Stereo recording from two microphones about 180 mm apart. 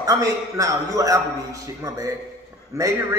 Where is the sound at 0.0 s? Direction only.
20° right (ahead or behind).